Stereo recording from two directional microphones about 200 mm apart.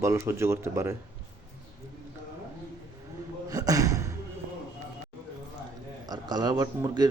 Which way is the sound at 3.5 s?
20° right (ahead or behind).